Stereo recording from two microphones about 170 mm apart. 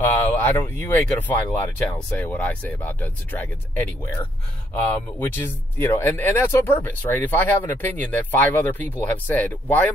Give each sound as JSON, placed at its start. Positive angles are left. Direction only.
{"t": 0.0, "sound": "speech", "side_deg": 10}
{"t": 5.2, "sound": "speech", "side_deg": 15}